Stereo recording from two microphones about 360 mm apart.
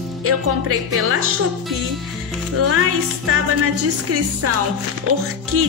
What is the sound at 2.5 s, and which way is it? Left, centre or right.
Music, right.